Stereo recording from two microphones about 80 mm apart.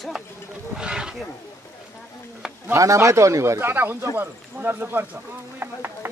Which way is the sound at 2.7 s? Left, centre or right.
Right.